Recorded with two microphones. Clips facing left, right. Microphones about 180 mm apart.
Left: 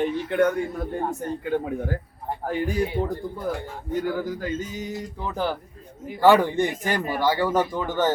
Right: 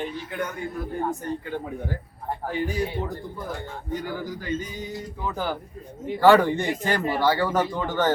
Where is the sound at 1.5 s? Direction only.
50° left (ahead or behind).